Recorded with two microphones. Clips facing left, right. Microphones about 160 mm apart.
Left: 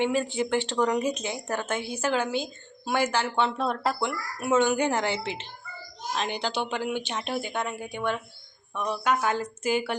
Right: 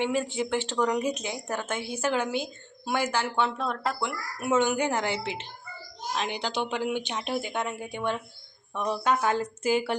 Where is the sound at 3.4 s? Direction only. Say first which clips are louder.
Left 3 dB; 30° left (ahead or behind).